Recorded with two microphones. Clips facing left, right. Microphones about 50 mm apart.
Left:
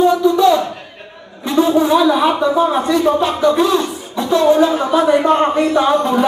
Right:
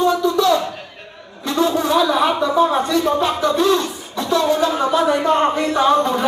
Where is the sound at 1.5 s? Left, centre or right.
Left.